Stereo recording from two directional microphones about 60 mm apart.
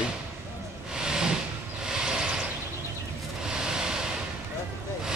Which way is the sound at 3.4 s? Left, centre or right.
Centre.